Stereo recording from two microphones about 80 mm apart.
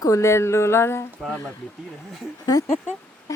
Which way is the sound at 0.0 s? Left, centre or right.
Left.